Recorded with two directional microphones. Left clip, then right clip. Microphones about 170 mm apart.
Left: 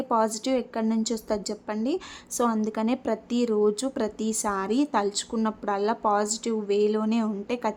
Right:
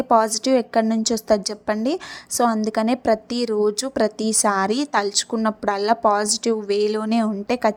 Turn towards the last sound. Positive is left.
turn(degrees=-25)  # may be behind; listen again after turning